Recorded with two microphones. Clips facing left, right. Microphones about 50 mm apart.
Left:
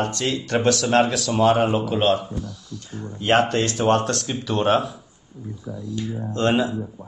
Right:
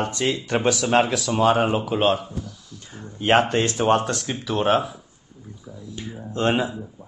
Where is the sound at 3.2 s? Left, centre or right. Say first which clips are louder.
Even; right.